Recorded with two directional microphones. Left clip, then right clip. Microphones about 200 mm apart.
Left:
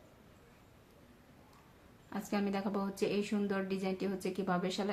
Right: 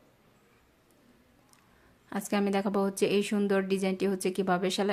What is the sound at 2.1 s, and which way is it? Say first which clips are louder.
Speech: right 7 dB; 45° right (ahead or behind).